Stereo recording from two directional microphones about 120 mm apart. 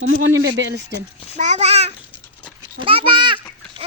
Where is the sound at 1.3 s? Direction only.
80° right; by 1.9 s 60° right (ahead or behind).